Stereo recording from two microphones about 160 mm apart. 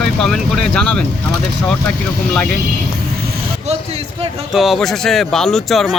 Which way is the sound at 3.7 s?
40° right (ahead or behind).